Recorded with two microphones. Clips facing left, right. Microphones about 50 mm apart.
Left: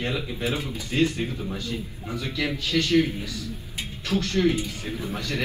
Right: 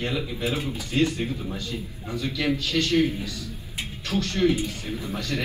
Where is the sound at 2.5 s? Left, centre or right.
Right.